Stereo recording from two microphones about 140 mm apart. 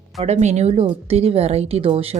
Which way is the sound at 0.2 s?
50° right (ahead or behind).